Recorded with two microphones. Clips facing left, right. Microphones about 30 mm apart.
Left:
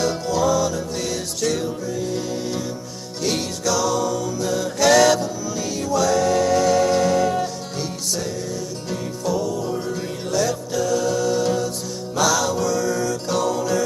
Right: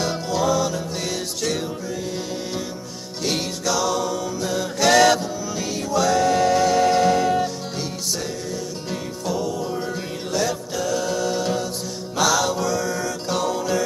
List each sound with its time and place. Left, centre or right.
0.0 s music: centre
3.3 s music: centre
9.2 s music: centre